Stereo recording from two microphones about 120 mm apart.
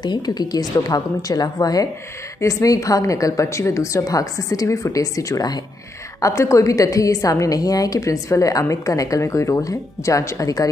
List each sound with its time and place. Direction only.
0.0 s a woman's voice: 35° left (ahead or behind)